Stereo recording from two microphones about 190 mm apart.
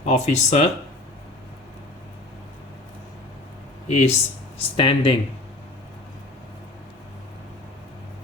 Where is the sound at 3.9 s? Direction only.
35° left (ahead or behind).